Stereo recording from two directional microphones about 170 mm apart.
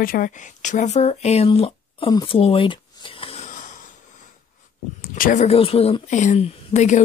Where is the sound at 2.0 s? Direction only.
25° left (ahead or behind); by 4.3 s 50° left (ahead or behind).